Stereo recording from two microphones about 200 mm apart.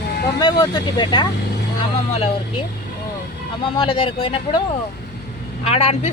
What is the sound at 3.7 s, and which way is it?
Speech, 25° left (ahead or behind).